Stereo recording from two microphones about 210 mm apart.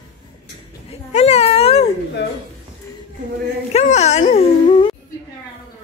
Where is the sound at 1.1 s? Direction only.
30° left (ahead or behind).